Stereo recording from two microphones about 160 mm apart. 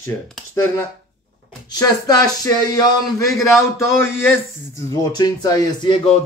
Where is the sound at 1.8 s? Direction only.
25° left (ahead or behind).